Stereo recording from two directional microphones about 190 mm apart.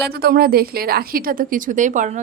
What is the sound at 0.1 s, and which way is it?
A woman's voice, 50° right (ahead or behind).